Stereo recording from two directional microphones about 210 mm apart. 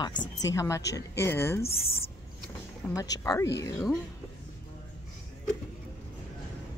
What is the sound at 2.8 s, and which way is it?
Speech, 10° left (ahead or behind).